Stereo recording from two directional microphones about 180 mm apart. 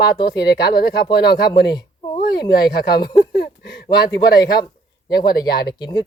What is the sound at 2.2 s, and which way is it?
Speech, 60° left (ahead or behind).